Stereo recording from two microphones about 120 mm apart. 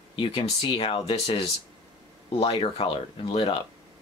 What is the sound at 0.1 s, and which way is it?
Speech, 45° left (ahead or behind).